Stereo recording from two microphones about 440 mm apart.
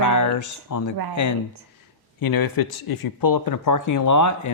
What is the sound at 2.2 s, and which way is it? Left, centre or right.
Speech, left.